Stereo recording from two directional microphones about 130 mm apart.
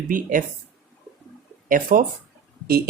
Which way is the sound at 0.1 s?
90° right.